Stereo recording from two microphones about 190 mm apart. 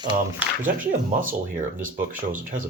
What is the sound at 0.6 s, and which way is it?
Speech, 45° right (ahead or behind).